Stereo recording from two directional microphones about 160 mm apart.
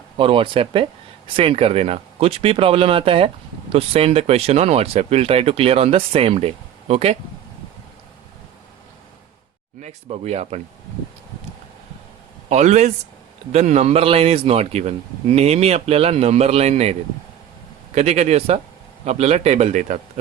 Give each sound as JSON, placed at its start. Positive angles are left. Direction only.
{"t": 0.2, "sound": "speech", "side_deg": -35}
{"t": 9.8, "sound": "speech", "side_deg": -40}
{"t": 12.5, "sound": "a man's voice", "side_deg": -45}